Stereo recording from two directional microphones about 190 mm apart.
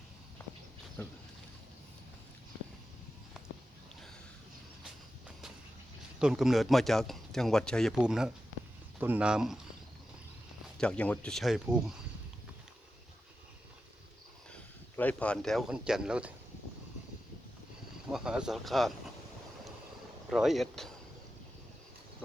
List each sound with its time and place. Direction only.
0.4 s walk: 10° left (ahead or behind)
6.1 s speech: 5° right (ahead or behind)
10.8 s speech: 5° left (ahead or behind)
14.5 s speech: 5° left (ahead or behind)
18.1 s speech: 5° right (ahead or behind)
20.3 s speech: centre (ahead or behind)